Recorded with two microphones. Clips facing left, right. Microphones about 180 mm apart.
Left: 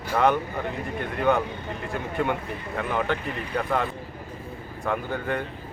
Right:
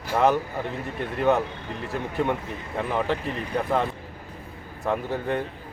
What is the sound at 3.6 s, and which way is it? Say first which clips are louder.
A woman's voice: right 1 dB; centre (ahead or behind).